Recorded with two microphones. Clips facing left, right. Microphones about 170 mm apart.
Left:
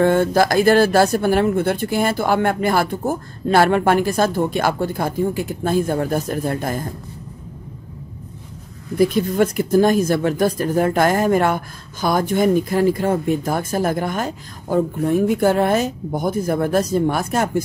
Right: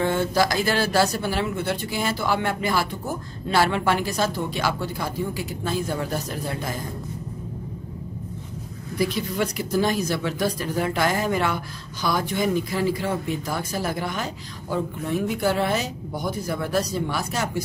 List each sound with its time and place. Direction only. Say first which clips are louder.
0.0 s speech: left 7 dB; 50° left (ahead or behind)
8.9 s speech: left 8 dB; 50° left (ahead or behind)